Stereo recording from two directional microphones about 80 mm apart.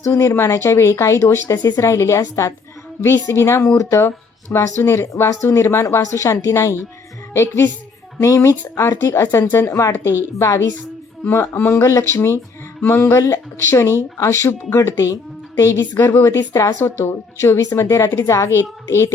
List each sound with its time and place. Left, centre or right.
0.0 s speech: left
8.2 s speech: left
10.7 s a sound: centre
11.3 s speech: left